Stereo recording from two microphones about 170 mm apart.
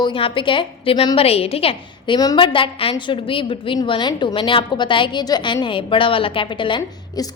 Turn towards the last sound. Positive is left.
turn(degrees=30)  # may be behind; listen again after turning